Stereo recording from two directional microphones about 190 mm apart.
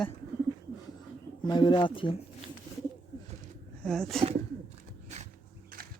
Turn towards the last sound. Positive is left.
turn(degrees=-35)  # may be behind; listen again after turning